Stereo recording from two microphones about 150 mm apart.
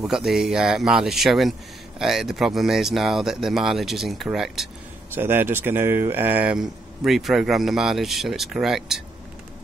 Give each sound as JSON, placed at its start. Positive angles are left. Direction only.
{"t": 0.0, "sound": "speech", "side_deg": 0}
{"t": 5.1, "sound": "speech", "side_deg": -15}